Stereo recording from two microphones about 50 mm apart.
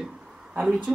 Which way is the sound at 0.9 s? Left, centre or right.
Centre.